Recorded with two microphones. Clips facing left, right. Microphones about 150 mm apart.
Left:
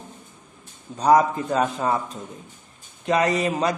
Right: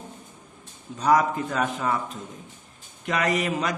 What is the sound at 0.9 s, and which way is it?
A man's voice, 30° left (ahead or behind).